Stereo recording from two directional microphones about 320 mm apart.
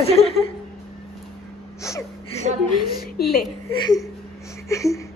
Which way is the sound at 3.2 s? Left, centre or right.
Left.